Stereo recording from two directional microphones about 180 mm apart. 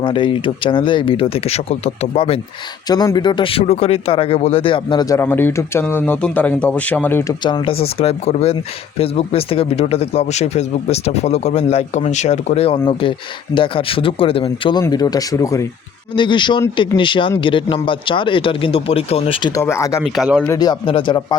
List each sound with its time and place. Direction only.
0.0 s speech: 30° left (ahead or behind)
2.9 s speech: 20° left (ahead or behind)
7.4 s speech: 30° left (ahead or behind)
19.6 s speech: 15° left (ahead or behind)
20.1 s a man's voice: centre (ahead or behind)
20.4 s speech: 20° left (ahead or behind)